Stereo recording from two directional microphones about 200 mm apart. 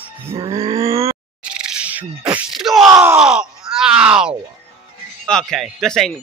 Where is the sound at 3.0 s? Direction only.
10° right (ahead or behind).